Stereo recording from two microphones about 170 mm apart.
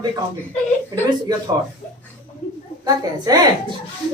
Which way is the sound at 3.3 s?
20° right (ahead or behind).